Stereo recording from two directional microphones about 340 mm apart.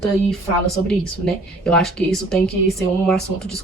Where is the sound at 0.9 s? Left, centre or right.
Centre.